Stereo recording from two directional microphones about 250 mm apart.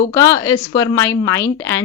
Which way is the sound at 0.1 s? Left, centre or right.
Centre.